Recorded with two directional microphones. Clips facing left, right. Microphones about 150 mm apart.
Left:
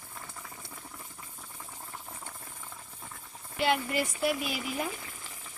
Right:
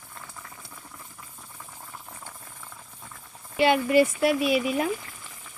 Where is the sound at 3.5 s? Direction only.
90° right.